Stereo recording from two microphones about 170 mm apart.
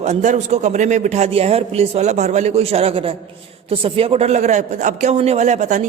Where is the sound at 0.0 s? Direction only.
45° right (ahead or behind).